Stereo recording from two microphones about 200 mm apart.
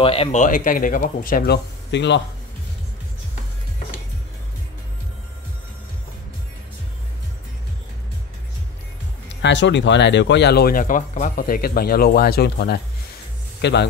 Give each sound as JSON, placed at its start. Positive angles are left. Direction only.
{"t": 0.0, "sound": "speech", "side_deg": 30}
{"t": 9.4, "sound": "a man's voice", "side_deg": 65}